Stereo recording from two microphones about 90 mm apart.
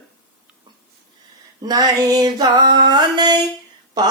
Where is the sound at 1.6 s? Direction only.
45° right (ahead or behind).